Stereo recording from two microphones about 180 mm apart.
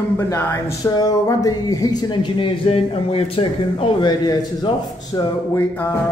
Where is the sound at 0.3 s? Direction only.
15° left (ahead or behind).